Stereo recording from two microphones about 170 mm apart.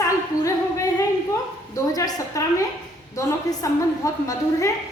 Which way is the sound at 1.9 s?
20° left (ahead or behind).